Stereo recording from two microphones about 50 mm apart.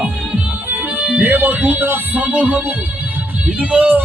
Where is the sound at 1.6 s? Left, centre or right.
Right.